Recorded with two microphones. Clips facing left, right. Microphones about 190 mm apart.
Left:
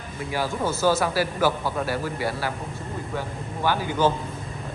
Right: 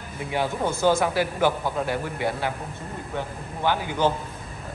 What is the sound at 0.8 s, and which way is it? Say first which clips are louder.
Speech: right 1 dB; 20° right (ahead or behind).